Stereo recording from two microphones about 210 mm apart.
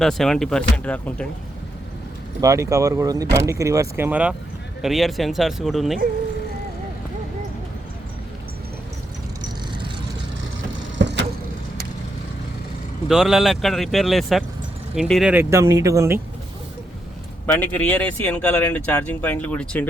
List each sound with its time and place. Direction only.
0.0 s speech: centre (ahead or behind)
2.4 s speech: 15° right (ahead or behind)
10.9 s vehicle: 55° right (ahead or behind)
13.1 s speech: centre (ahead or behind)
15.3 s speech: 10° right (ahead or behind)
17.4 s speech: 10° left (ahead or behind)